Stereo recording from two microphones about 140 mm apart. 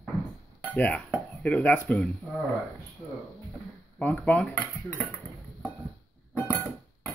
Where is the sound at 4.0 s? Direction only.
10° left (ahead or behind).